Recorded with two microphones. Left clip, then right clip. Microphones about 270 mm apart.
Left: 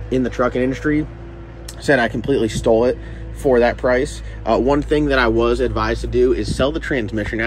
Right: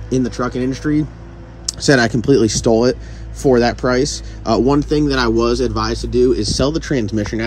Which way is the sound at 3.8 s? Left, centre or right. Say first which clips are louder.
Right 1 dB; centre.